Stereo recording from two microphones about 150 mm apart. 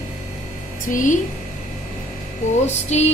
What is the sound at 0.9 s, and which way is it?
Speech, 60° left (ahead or behind).